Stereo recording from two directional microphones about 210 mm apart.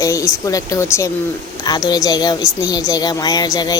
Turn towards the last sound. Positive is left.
turn(degrees=20)  # may be behind; listen again after turning